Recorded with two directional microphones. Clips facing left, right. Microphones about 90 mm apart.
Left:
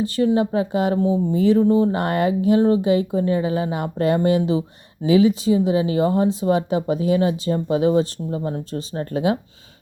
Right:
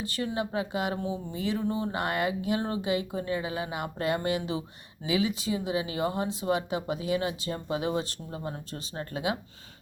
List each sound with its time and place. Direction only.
0.3 s speech: 35° left (ahead or behind)